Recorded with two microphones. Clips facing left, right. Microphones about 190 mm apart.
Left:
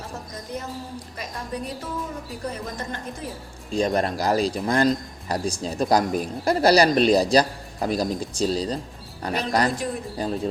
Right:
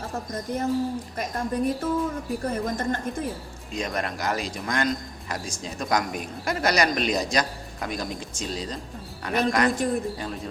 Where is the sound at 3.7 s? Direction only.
30° left (ahead or behind).